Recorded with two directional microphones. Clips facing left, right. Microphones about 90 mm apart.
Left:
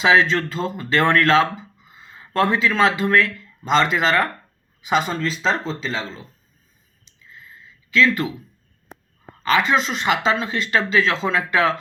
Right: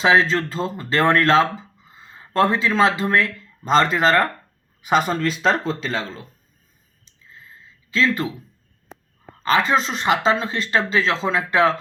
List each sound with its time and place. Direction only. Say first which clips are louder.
0.0 s speech: even; 35° right (ahead or behind); by 6.2 s 50° right (ahead or behind)
7.0 s a sound: left 1 dB; 35° right (ahead or behind)
7.9 s speech: left 2 dB; 30° right (ahead or behind)